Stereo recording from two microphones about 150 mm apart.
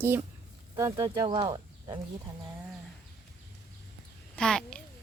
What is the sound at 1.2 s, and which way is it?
Speech, 25° right (ahead or behind).